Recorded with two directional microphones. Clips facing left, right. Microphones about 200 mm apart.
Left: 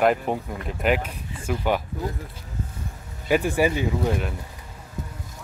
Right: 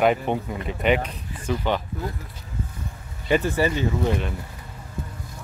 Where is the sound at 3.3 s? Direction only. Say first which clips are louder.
Left 1 dB; 10° left (ahead or behind).